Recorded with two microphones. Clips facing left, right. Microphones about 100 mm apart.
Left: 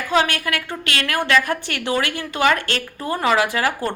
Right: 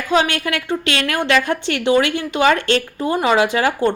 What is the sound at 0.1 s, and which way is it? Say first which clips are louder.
A woman's voice: right 2 dB; 20° right (ahead or behind).